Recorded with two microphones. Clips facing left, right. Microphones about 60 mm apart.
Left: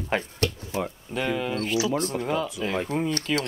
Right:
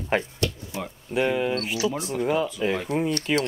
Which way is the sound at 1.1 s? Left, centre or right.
Centre.